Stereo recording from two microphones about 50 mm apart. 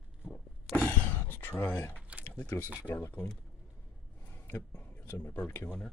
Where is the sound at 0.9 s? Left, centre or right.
Left.